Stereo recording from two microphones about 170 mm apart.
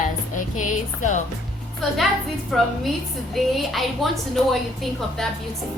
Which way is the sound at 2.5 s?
Centre (ahead or behind).